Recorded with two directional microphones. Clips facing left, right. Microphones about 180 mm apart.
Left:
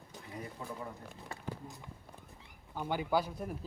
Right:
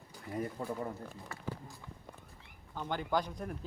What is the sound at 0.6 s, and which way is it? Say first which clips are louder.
Speech: right 5 dB; 50° right (ahead or behind).